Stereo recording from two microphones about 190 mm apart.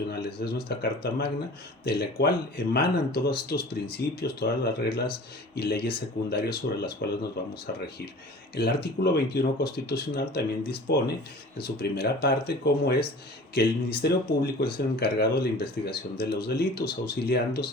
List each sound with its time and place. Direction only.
0.1 s speech: 55° left (ahead or behind)
8.5 s speech: 55° left (ahead or behind)